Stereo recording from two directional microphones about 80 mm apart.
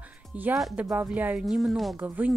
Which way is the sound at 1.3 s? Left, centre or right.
Centre.